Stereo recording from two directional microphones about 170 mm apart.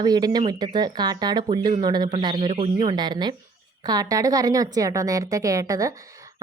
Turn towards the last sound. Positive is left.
turn(degrees=-20)  # may be behind; listen again after turning